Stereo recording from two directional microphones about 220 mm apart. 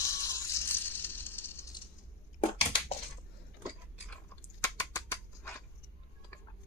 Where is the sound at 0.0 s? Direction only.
15° left (ahead or behind).